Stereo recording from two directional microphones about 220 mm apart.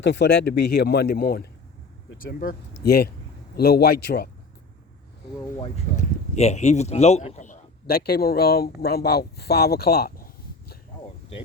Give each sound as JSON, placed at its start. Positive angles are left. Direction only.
{"t": 0.0, "sound": "speech", "side_deg": 50}
{"t": 6.0, "sound": "a man's voice", "side_deg": 30}